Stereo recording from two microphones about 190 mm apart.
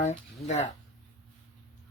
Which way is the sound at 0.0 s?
35° left (ahead or behind).